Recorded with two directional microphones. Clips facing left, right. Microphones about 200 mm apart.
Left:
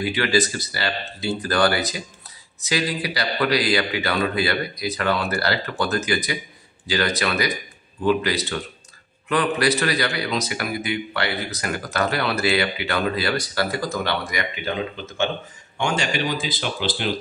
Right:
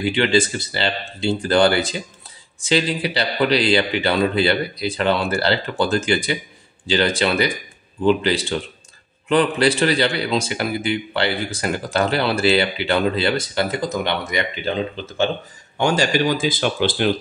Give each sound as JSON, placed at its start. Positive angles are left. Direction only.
{"t": 0.0, "sound": "speech", "side_deg": -25}